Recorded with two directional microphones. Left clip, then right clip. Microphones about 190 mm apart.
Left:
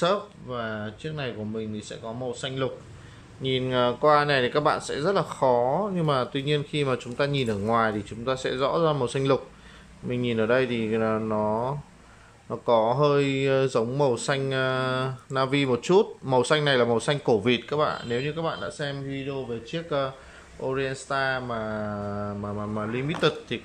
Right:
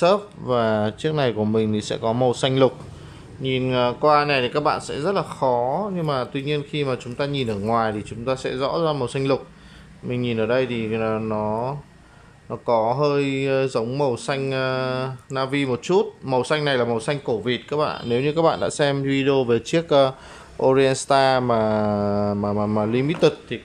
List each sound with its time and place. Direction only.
0.5 s speech: 35° right (ahead or behind)
3.4 s speech: 5° right (ahead or behind); by 18.9 s 30° right (ahead or behind)
18.9 s speech: 45° right (ahead or behind)
19.9 s speech: 25° right (ahead or behind)
23.5 s speech: 5° right (ahead or behind)